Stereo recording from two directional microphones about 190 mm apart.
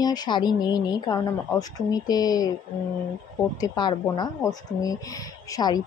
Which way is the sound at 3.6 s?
20° left (ahead or behind).